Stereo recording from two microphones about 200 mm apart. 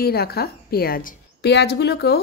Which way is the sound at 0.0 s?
50° left (ahead or behind).